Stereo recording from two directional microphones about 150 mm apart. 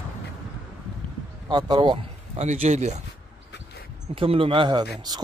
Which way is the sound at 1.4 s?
30° right (ahead or behind).